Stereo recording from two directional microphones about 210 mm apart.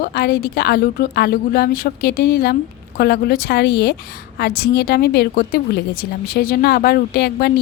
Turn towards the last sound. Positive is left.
turn(degrees=50)  # may be behind; listen again after turning